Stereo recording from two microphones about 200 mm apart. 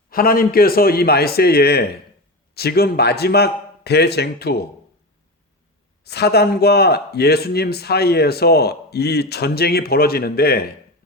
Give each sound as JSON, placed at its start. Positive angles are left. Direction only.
{"t": 0.1, "sound": "speech", "side_deg": 45}
{"t": 6.1, "sound": "speech", "side_deg": 55}